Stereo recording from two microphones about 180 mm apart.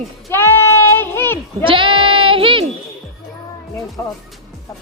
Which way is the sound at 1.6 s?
30° right (ahead or behind).